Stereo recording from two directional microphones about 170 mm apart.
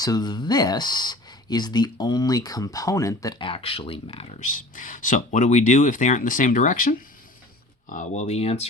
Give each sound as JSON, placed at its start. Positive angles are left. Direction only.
{"t": 0.0, "sound": "speech", "side_deg": 25}
{"t": 4.4, "sound": "speech", "side_deg": 50}